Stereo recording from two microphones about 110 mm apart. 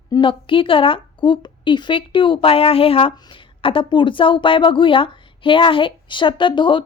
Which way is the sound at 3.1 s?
45° left (ahead or behind).